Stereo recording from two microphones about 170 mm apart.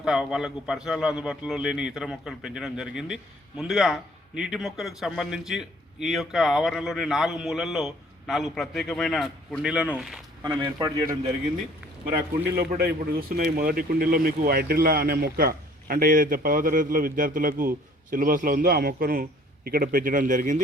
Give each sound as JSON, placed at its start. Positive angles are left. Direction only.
{"t": 0.0, "sound": "a man's voice", "side_deg": -5}
{"t": 10.4, "sound": "a man's voice", "side_deg": -25}
{"t": 12.5, "sound": "speech", "side_deg": -65}